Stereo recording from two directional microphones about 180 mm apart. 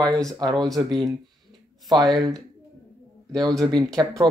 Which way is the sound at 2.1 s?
20° right (ahead or behind).